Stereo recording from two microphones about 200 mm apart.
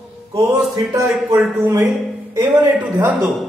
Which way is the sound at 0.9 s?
15° right (ahead or behind).